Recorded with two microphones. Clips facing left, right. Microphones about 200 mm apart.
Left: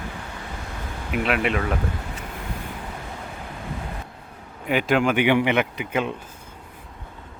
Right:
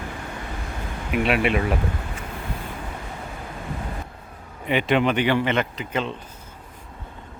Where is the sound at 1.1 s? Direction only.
Centre (ahead or behind).